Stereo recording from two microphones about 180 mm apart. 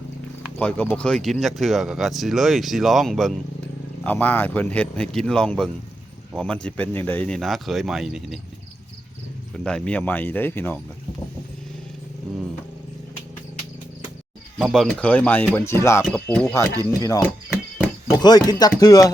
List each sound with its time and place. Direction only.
0.6 s speech: 5° left (ahead or behind)
9.6 s speech: 5° left (ahead or behind)
14.6 s speech: centre (ahead or behind)
17.0 s speech: 20° left (ahead or behind)